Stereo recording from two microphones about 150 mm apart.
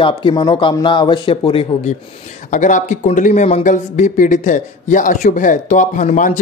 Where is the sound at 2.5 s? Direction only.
55° left (ahead or behind).